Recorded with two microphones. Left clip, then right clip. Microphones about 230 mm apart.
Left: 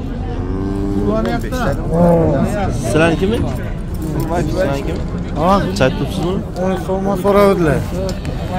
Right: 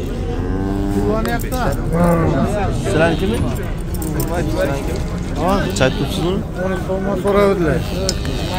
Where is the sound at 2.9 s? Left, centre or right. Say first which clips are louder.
Left 2 dB; centre.